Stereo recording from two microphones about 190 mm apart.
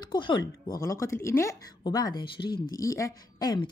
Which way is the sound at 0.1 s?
25° left (ahead or behind).